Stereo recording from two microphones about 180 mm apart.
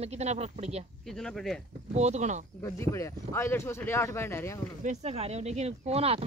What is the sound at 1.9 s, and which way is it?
Speech, 40° right (ahead or behind).